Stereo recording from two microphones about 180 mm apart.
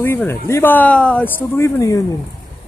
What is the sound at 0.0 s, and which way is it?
Speech, 15° left (ahead or behind).